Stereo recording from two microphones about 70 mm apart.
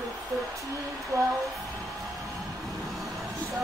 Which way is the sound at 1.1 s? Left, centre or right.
Right.